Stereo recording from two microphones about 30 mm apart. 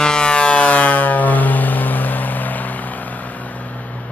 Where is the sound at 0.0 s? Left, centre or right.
Left.